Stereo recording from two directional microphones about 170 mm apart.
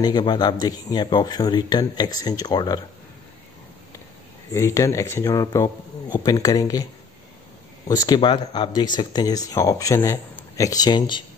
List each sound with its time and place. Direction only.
0.0 s speech: 25° left (ahead or behind)
4.5 s speech: 15° left (ahead or behind)
7.9 s speech: 25° left (ahead or behind)